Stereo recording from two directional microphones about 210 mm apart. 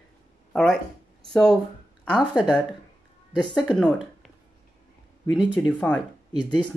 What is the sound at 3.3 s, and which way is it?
Speech, 20° left (ahead or behind).